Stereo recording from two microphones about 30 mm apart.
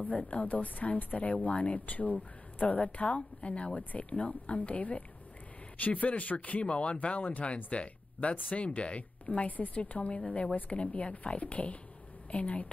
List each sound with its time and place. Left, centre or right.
0.3 s a woman's voice: left
3.2 s a woman's voice: left
6.6 s speech: left
9.8 s speech: left
11.3 s speech: left